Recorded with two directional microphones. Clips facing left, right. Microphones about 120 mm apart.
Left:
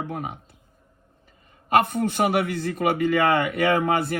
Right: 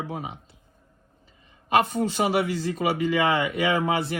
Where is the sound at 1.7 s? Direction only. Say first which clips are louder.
Left 2 dB; 55° left (ahead or behind).